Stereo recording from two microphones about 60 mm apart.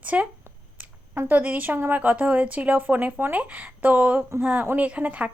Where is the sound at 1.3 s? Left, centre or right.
Right.